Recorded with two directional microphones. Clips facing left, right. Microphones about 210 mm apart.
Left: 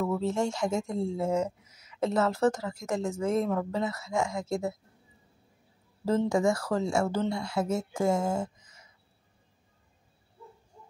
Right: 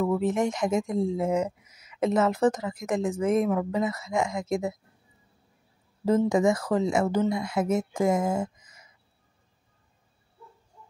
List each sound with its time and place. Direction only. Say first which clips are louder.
0.0 s speech: right 4 dB; 15° right (ahead or behind)
6.0 s speech: right 3 dB; 20° right (ahead or behind)